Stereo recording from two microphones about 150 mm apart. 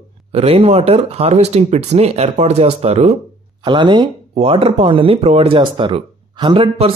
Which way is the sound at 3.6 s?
30° right (ahead or behind).